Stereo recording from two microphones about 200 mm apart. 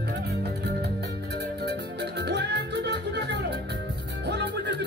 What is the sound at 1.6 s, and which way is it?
Music, 60° right (ahead or behind).